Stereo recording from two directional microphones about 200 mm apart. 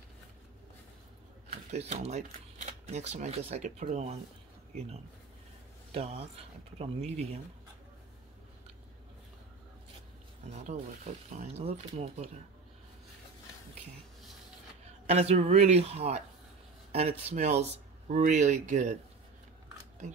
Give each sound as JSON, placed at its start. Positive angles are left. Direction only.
{"t": 1.5, "sound": "speech", "side_deg": -35}
{"t": 5.9, "sound": "speech", "side_deg": -30}
{"t": 10.5, "sound": "speech", "side_deg": -35}
{"t": 15.0, "sound": "speech", "side_deg": -30}
{"t": 17.2, "sound": "speech", "side_deg": -30}